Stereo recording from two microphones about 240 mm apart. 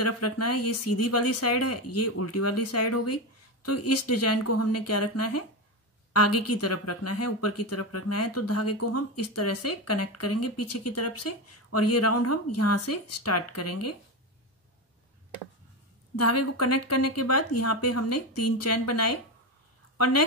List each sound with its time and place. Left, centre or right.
0.0 s speech: left
16.2 s a woman's voice: left